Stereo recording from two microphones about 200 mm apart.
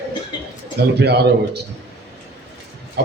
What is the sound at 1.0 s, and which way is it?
Speech, 55° right (ahead or behind).